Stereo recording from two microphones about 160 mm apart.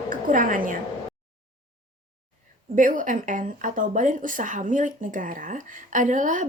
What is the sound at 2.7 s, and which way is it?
Speech, 55° right (ahead or behind).